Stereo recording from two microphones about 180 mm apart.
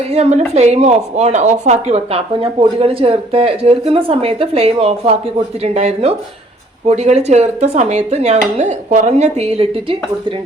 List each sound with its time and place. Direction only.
0.1 s speech: 35° right (ahead or behind)